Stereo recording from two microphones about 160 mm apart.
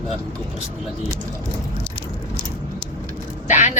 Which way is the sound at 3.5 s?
50° left (ahead or behind).